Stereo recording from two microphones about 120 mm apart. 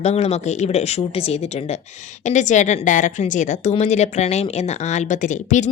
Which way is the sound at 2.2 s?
90° left.